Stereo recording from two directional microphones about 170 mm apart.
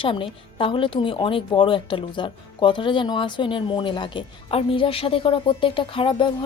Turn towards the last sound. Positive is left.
turn(degrees=30)  # may be behind; listen again after turning